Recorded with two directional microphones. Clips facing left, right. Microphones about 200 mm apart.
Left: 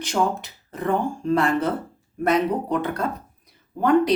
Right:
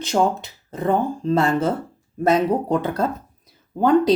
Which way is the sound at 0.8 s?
25° right (ahead or behind).